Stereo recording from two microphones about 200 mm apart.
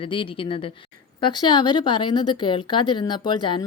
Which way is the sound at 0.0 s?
25° left (ahead or behind).